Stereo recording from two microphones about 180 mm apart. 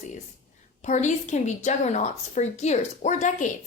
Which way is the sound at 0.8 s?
40° left (ahead or behind).